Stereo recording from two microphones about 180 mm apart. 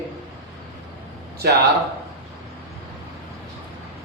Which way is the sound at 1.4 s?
60° right (ahead or behind).